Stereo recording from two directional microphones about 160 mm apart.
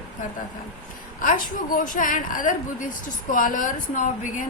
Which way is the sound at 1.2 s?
55° left (ahead or behind).